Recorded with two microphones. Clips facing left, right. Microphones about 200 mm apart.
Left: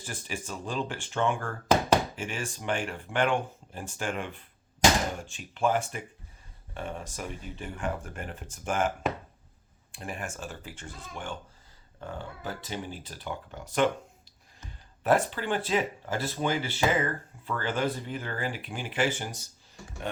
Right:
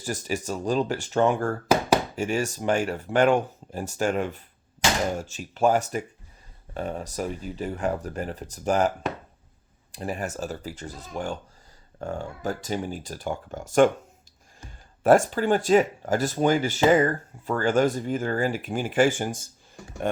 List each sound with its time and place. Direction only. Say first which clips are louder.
0.0 s speech: right 9 dB; 40° right (ahead or behind)
1.6 s a sound: right 1 dB; 10° right (ahead or behind)
2.1 s speech: right 9 dB; 40° right (ahead or behind)
9.9 s speech: right 7 dB; 40° right (ahead or behind)
15.0 s speech: right 7 dB; 45° right (ahead or behind)